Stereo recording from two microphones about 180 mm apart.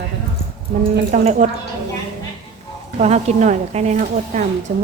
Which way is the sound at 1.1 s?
40° right (ahead or behind).